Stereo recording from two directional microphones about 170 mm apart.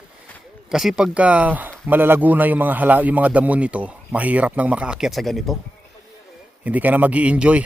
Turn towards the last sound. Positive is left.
turn(degrees=-5)  # may be behind; listen again after turning